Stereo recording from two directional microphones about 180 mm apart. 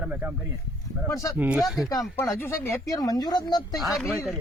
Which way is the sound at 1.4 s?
5° right (ahead or behind).